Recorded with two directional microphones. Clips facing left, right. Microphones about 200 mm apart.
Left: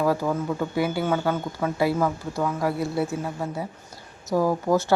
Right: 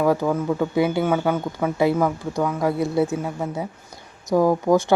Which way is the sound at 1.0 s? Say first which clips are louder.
Right 3 dB; 10° right (ahead or behind).